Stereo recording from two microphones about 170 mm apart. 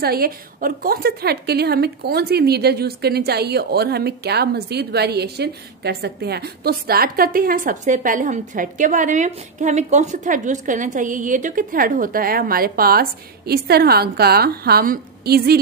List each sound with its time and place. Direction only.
0.0 s a woman's voice: 65° right (ahead or behind)